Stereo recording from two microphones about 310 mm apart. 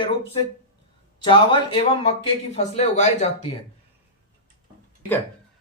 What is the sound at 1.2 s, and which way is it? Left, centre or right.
Speech, centre.